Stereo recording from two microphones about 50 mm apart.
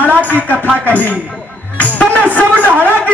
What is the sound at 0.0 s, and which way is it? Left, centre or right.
Music, left.